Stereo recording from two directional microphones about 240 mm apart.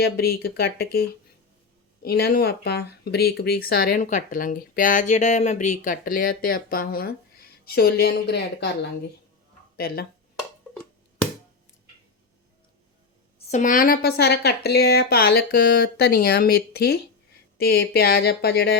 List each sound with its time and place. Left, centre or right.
0.0 s speech: left
2.0 s speech: left
9.7 s speech: left
13.5 s speech: left